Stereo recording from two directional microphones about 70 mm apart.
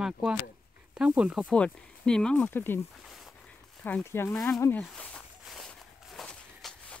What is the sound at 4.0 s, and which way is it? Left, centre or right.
Speech, left.